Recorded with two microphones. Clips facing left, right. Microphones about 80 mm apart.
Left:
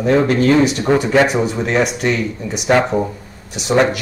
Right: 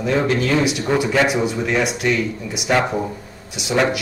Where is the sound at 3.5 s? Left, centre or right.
Left.